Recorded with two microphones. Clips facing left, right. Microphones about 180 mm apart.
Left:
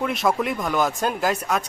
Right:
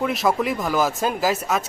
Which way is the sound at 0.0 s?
Centre (ahead or behind).